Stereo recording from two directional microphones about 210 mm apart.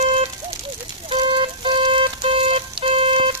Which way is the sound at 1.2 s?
25° right (ahead or behind).